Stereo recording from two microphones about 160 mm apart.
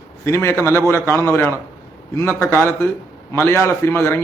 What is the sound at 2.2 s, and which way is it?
A man's voice, 15° left (ahead or behind).